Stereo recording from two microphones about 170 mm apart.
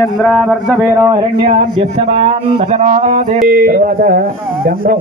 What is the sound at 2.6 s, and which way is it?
Mantra, 45° right (ahead or behind).